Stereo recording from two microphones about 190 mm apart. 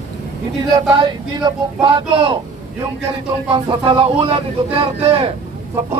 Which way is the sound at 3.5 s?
25° right (ahead or behind).